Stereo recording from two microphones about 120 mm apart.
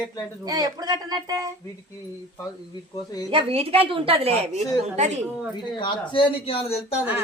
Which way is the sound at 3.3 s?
50° right (ahead or behind).